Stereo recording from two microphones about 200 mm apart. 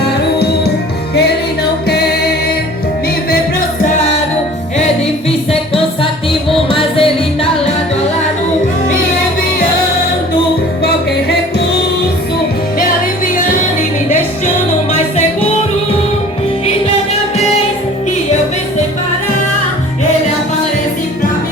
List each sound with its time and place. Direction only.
5.5 s music: 30° left (ahead or behind)